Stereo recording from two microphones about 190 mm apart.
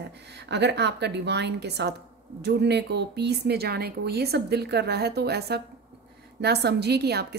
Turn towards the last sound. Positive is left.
turn(degrees=-60)  # may be behind; listen again after turning